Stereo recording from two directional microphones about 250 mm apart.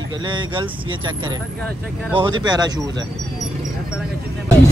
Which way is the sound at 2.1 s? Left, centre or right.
Centre.